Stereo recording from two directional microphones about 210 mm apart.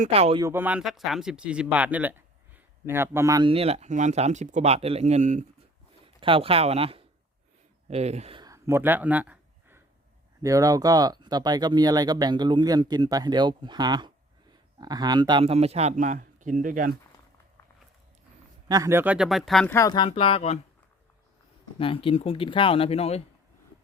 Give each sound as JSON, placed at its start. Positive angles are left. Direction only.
{"t": 0.0, "sound": "speech", "side_deg": -30}
{"t": 0.4, "sound": "speech", "side_deg": -10}
{"t": 18.7, "sound": "speech", "side_deg": -15}
{"t": 19.7, "sound": "speech", "side_deg": 20}
{"t": 21.8, "sound": "speech", "side_deg": 25}